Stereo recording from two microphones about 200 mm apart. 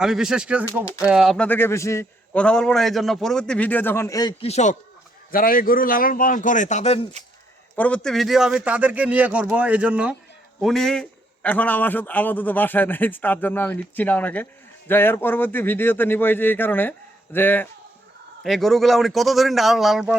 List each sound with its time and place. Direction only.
0.0 s a man's voice: 5° right (ahead or behind)
0.9 s a man's voice: 15° left (ahead or behind)
1.1 s a man's voice: centre (ahead or behind); by 7.1 s 30° left (ahead or behind)
7.8 s a man's voice: 5° left (ahead or behind)